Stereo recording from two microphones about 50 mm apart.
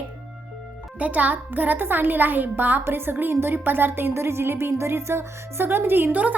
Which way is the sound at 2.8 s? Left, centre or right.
Right.